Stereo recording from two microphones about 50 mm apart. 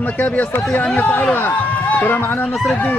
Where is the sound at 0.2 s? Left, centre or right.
Left.